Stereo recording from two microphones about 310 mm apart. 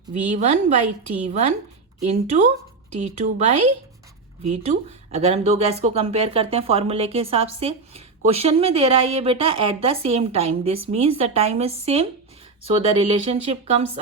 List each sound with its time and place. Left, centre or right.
0.1 s speech: right
3.0 s speech: right